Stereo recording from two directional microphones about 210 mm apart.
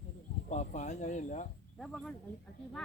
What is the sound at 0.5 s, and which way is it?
Speech, 35° left (ahead or behind).